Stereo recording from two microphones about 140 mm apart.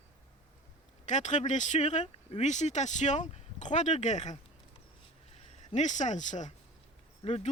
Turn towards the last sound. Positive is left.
turn(degrees=45)  # may be behind; listen again after turning